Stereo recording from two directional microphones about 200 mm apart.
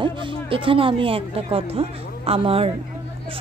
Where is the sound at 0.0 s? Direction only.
25° right (ahead or behind).